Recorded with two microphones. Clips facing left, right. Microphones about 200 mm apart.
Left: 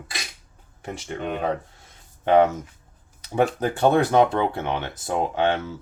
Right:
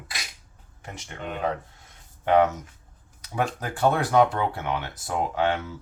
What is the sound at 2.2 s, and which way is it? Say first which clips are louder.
Speech: left 3 dB; 30° left (ahead or behind).